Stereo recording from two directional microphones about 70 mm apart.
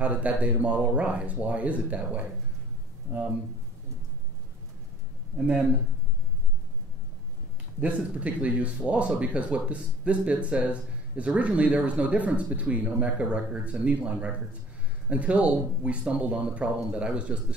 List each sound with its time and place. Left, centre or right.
0.0 s speech: centre
7.8 s speech: right